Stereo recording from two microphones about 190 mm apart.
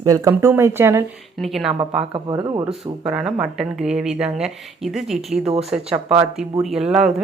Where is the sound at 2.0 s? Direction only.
25° right (ahead or behind).